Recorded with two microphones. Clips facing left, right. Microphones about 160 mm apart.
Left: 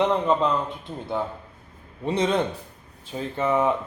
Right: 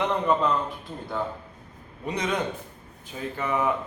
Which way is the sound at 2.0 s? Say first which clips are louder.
Left 5 dB; 30° left (ahead or behind).